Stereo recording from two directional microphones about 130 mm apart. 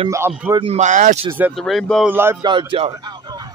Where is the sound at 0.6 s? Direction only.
60° right (ahead or behind).